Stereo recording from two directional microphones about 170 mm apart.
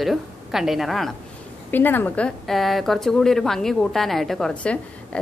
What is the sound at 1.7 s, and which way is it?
A woman's voice, 10° left (ahead or behind).